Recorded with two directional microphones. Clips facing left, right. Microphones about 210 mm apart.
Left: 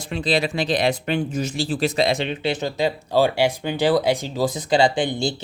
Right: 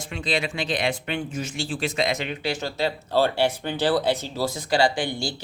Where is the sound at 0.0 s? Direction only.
35° left (ahead or behind).